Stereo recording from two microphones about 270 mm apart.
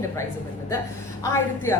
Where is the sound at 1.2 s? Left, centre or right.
Centre.